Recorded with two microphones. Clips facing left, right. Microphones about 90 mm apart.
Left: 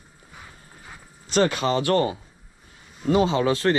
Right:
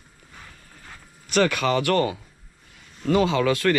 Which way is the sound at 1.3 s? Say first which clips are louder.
Even; 25° left (ahead or behind).